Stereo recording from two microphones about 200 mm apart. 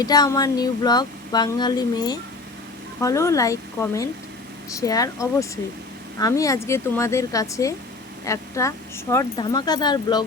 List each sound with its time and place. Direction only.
0.0 s a woman's voice: 20° left (ahead or behind)